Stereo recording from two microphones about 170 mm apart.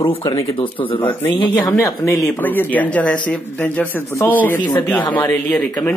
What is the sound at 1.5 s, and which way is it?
Speech, 10° left (ahead or behind).